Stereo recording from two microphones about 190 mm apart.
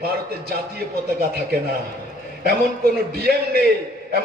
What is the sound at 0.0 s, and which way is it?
A man's voice, 55° right (ahead or behind).